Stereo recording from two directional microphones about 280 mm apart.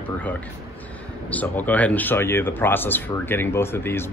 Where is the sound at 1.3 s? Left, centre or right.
Centre.